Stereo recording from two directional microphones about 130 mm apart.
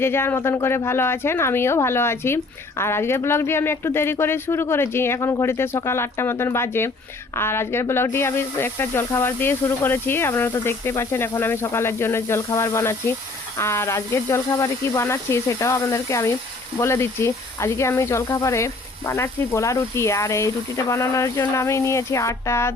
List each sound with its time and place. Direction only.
0.0 s speech: 20° left (ahead or behind)